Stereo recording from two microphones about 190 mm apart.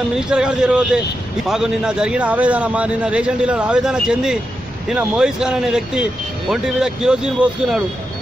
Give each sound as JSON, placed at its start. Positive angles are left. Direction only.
{"t": 0.3, "sound": "a man's voice", "side_deg": -5}